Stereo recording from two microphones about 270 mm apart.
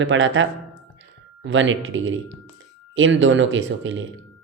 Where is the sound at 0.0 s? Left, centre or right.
Right.